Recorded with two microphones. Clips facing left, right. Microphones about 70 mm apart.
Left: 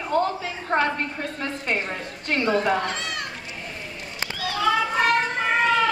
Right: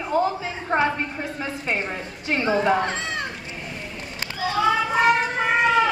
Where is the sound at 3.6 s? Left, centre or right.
Centre.